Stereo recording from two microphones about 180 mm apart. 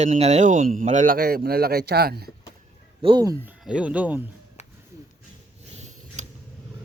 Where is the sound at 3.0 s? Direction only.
25° right (ahead or behind).